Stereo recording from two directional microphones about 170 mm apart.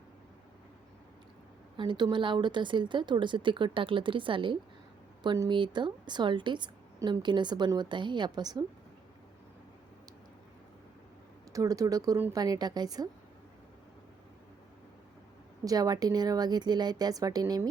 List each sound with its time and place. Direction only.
1.7 s a woman's voice: 30° right (ahead or behind)
11.5 s a woman's voice: 20° right (ahead or behind)
15.6 s a woman's voice: 20° right (ahead or behind)